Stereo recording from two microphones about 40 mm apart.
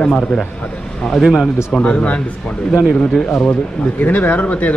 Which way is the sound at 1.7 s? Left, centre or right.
Left.